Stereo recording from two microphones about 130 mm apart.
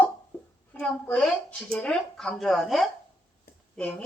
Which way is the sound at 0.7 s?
10° left (ahead or behind).